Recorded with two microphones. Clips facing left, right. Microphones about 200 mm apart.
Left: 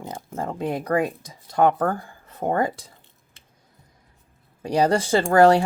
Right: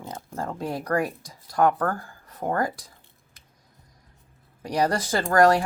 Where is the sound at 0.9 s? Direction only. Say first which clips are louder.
Left 2 dB; 20° left (ahead or behind).